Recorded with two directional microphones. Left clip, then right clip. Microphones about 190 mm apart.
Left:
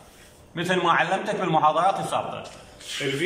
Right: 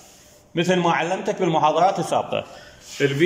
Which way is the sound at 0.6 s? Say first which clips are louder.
Right 1 dB; 30° right (ahead or behind).